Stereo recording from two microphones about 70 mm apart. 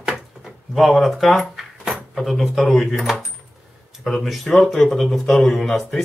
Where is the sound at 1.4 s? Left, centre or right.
Centre.